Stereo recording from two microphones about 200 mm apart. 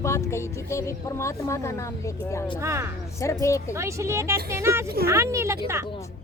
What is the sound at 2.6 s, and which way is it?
Speech, 15° right (ahead or behind).